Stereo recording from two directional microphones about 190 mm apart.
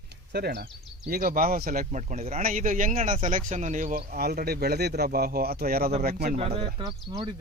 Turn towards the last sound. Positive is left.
turn(degrees=-20)  # may be behind; listen again after turning